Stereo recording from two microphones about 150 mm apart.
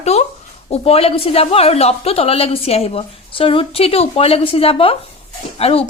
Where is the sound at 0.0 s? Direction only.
45° left (ahead or behind).